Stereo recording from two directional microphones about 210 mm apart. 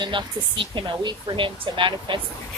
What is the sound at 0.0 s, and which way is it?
Speech, 20° right (ahead or behind).